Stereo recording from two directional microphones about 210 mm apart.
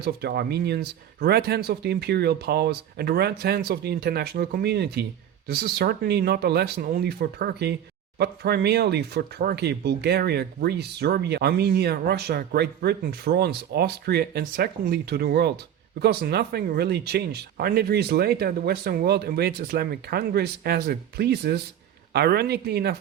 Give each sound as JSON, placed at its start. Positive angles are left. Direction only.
{"t": 0.0, "sound": "speech", "side_deg": -50}